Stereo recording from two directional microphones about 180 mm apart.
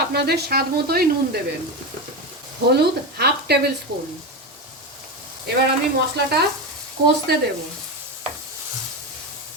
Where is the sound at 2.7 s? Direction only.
65° right (ahead or behind).